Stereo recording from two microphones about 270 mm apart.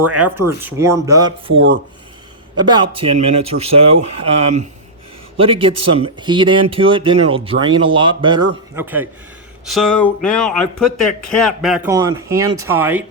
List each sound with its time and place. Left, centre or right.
0.1 s speech: centre